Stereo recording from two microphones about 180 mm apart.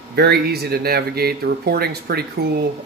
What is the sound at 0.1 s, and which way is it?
Speech, 60° right (ahead or behind).